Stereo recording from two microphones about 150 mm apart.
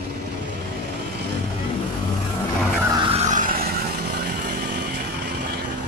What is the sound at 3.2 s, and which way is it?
Vehicle, 55° right (ahead or behind).